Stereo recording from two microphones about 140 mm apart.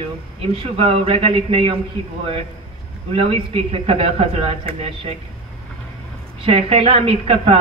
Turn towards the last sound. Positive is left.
turn(degrees=-45)  # may be behind; listen again after turning